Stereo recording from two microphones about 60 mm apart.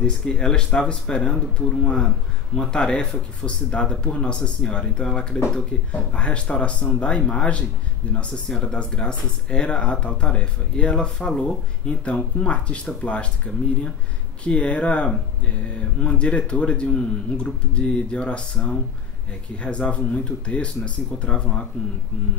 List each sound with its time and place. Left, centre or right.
0.0 s speech: centre
8.5 s speech: centre
12.0 s speech: centre
14.4 s speech: left